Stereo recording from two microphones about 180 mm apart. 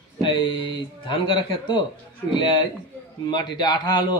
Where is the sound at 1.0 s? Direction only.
30° left (ahead or behind).